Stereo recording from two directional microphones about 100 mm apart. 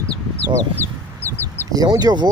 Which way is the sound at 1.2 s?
20° left (ahead or behind).